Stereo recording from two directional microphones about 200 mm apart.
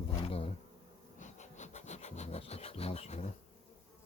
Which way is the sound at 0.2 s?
30° left (ahead or behind).